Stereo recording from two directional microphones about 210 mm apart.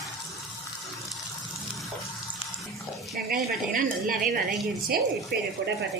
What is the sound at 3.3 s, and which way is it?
A woman's voice, 40° right (ahead or behind).